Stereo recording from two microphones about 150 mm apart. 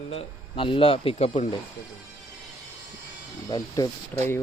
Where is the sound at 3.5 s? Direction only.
25° left (ahead or behind).